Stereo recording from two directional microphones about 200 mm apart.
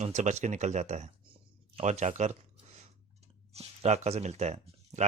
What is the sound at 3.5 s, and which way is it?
Speech, 30° right (ahead or behind).